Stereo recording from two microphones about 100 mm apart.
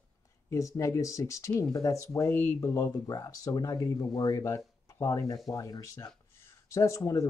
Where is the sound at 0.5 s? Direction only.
30° left (ahead or behind).